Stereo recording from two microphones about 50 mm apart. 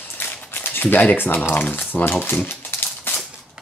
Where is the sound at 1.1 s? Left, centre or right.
Left.